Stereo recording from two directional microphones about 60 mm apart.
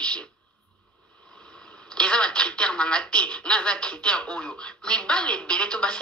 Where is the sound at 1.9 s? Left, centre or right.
Centre.